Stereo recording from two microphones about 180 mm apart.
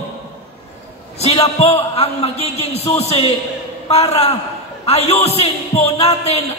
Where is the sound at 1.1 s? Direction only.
35° left (ahead or behind).